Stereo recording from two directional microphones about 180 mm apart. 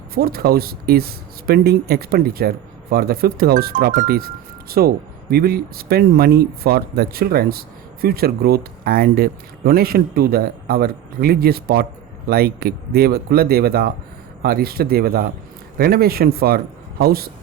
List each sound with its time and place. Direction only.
0.1 s speech: 55° right (ahead or behind)